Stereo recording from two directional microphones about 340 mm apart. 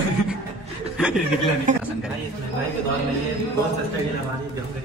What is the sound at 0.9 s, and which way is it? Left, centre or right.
Speech, centre.